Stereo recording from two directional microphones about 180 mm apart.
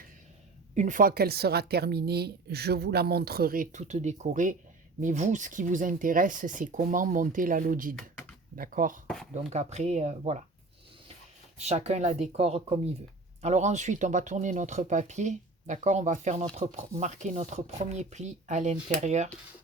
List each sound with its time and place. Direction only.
0.7 s a woman's voice: 40° right (ahead or behind)
11.6 s speech: 35° right (ahead or behind)